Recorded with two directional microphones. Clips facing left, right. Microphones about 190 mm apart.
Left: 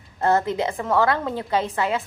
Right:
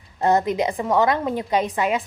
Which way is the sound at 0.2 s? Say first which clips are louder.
Right 1 dB; 15° right (ahead or behind).